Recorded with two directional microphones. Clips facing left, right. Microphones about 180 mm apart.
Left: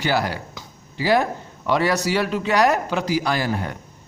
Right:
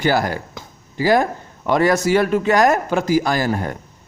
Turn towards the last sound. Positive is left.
turn(degrees=-45)  # may be behind; listen again after turning